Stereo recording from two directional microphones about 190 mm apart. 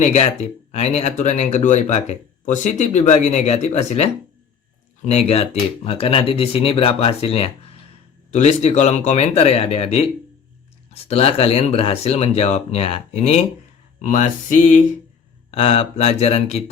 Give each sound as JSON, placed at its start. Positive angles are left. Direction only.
{"t": 0.0, "sound": "speech", "side_deg": 35}
{"t": 14.0, "sound": "speech", "side_deg": 40}
{"t": 15.5, "sound": "speech", "side_deg": 30}